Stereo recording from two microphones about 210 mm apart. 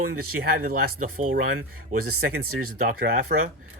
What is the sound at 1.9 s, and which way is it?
Speech, 45° right (ahead or behind).